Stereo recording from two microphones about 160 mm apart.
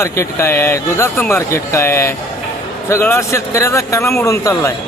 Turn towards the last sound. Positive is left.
turn(degrees=20)  # may be behind; listen again after turning